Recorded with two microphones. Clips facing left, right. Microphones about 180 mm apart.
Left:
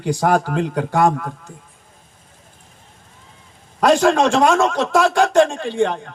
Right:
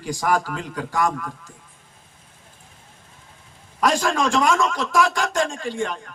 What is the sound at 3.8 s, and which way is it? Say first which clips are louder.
A man's voice: left 7 dB; 65° left (ahead or behind).